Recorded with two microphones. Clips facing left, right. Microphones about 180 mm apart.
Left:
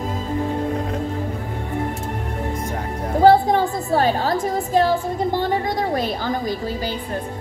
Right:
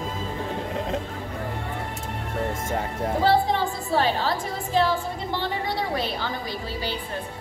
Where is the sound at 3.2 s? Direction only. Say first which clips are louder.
Left 8 dB; 45° left (ahead or behind).